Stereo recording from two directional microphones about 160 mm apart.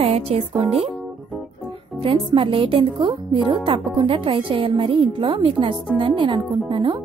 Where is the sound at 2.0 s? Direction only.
35° right (ahead or behind).